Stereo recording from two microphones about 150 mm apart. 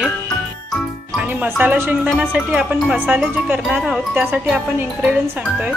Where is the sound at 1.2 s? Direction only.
10° right (ahead or behind).